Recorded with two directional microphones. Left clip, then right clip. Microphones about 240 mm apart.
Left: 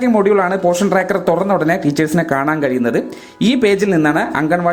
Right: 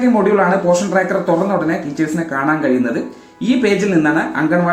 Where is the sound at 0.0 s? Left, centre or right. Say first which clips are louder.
Even; left.